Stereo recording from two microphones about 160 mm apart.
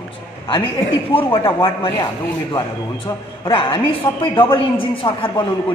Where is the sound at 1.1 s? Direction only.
30° left (ahead or behind).